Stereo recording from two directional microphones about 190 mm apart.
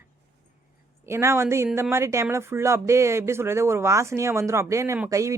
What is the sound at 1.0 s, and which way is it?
Speech, 15° right (ahead or behind).